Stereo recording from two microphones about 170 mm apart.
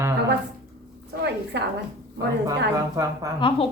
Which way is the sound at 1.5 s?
90° right.